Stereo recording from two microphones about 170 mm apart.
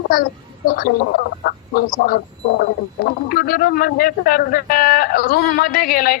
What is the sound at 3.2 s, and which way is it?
A man's voice, 60° left (ahead or behind).